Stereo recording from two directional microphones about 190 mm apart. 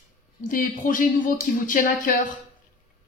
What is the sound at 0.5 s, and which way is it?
Speech, 45° left (ahead or behind).